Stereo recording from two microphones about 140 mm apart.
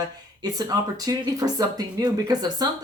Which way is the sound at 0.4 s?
25° right (ahead or behind).